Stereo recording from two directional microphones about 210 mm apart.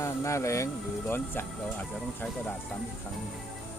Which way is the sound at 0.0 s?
15° left (ahead or behind).